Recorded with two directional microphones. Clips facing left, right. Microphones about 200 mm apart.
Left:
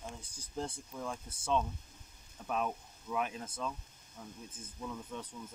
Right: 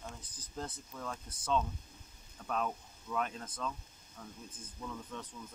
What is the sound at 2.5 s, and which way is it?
Speech, 10° left (ahead or behind).